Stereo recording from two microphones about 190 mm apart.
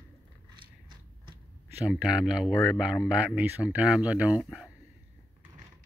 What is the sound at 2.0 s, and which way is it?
Speech, 5° right (ahead or behind).